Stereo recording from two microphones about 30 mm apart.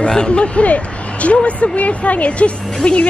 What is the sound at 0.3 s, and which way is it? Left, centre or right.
A woman's voice, left.